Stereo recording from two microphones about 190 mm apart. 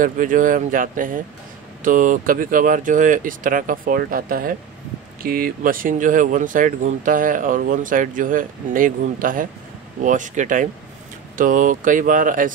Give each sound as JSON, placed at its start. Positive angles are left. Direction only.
{"t": 0.0, "sound": "speech", "side_deg": -45}